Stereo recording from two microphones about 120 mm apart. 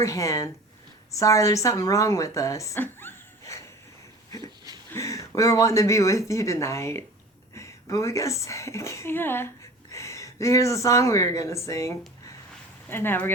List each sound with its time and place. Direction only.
0.0 s a woman's voice: 25° left (ahead or behind)
4.9 s a woman's voice: 25° left (ahead or behind)